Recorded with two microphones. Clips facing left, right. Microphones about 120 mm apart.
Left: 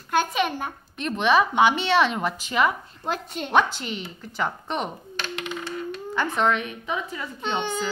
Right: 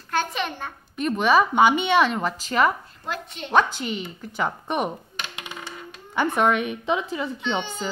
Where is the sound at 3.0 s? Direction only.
40° left (ahead or behind).